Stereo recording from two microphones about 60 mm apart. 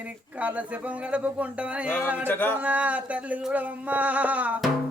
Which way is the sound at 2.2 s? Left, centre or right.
Left.